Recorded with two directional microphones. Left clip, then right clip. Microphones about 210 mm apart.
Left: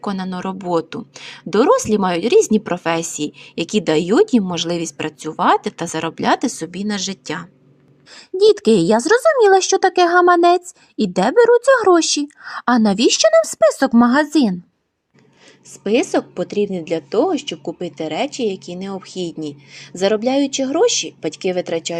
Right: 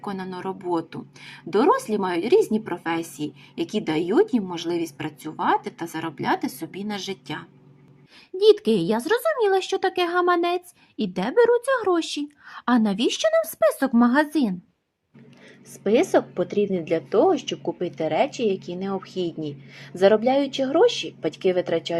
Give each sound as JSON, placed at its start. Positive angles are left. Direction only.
{"t": 0.0, "sound": "speech", "side_deg": 40}
{"t": 15.8, "sound": "a woman's voice", "side_deg": 25}